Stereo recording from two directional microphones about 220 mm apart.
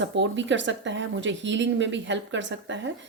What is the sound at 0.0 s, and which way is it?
Speech, 55° right (ahead or behind).